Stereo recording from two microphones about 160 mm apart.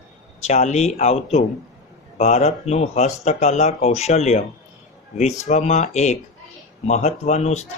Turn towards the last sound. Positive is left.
turn(degrees=45)  # may be behind; listen again after turning